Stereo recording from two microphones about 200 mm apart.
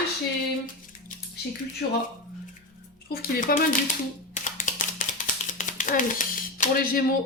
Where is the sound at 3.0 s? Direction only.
45° left (ahead or behind).